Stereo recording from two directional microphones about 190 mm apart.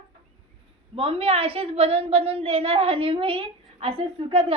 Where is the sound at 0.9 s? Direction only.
30° right (ahead or behind).